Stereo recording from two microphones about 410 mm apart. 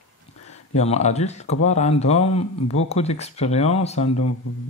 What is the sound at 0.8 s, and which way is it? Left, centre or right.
Speech, centre.